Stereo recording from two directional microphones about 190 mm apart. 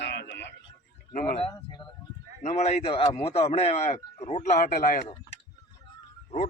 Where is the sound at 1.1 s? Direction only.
45° left (ahead or behind).